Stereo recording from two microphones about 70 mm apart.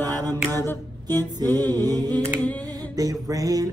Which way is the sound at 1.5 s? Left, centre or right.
Left.